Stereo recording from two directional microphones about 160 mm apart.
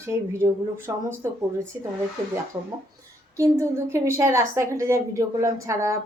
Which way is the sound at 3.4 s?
15° right (ahead or behind).